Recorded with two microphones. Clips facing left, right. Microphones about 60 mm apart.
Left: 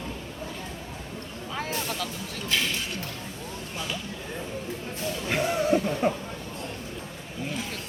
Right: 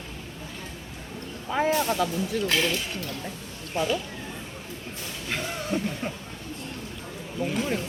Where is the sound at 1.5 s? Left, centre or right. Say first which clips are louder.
Right 8 dB; right.